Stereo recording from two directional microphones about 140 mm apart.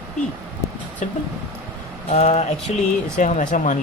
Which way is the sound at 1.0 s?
60° left (ahead or behind).